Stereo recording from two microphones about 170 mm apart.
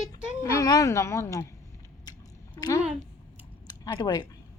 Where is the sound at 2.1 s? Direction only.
20° left (ahead or behind).